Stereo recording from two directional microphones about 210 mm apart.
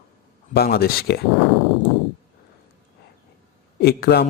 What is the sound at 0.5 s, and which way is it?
Speech, 45° left (ahead or behind).